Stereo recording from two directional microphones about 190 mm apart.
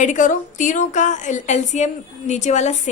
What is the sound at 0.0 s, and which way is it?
A woman's voice, 40° left (ahead or behind).